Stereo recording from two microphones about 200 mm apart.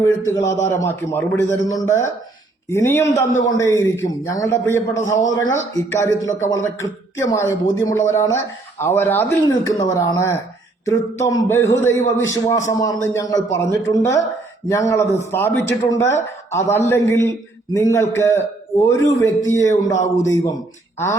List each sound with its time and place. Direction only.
0.0 s speech: 15° left (ahead or behind)